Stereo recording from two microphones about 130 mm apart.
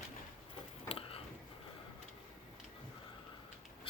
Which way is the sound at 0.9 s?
45° left (ahead or behind).